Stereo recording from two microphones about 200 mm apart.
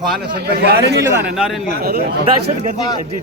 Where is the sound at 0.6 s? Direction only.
55° right (ahead or behind).